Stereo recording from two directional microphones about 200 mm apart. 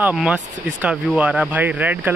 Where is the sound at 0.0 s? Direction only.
5° right (ahead or behind).